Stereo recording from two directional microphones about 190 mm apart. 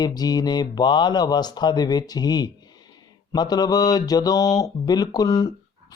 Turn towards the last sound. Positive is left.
turn(degrees=20)  # may be behind; listen again after turning